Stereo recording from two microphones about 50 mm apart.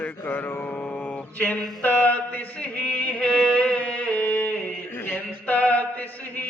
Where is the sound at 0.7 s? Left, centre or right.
Left.